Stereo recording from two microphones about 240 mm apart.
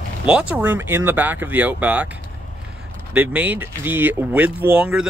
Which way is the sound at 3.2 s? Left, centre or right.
Centre.